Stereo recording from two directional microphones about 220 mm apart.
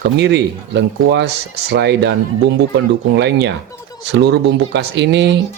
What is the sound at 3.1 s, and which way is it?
Speech, 50° right (ahead or behind).